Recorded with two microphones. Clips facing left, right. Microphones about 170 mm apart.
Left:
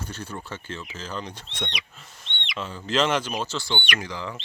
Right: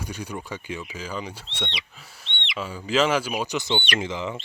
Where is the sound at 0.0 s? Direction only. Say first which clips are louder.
Right 2 dB; 10° right (ahead or behind).